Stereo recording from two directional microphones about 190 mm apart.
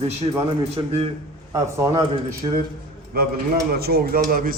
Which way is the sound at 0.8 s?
20° right (ahead or behind).